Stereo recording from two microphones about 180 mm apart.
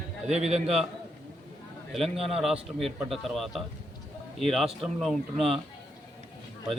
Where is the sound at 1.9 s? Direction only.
Centre (ahead or behind).